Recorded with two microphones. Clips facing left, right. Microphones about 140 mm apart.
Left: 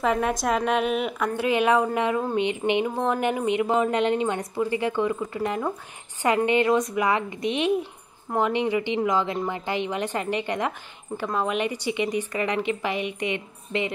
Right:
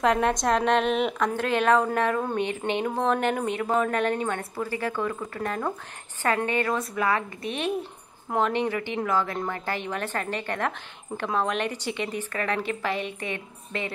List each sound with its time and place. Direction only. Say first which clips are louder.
0.0 s a woman's voice: right 1 dB; 5° left (ahead or behind)